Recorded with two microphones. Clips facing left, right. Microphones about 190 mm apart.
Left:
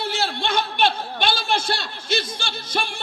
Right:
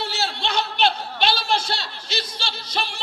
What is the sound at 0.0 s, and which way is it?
A man's voice, 50° left (ahead or behind).